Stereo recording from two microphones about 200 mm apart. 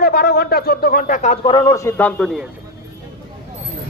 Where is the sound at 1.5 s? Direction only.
15° left (ahead or behind); by 2.5 s centre (ahead or behind).